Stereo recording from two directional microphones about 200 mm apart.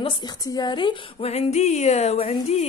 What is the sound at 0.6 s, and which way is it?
Speech, 20° left (ahead or behind).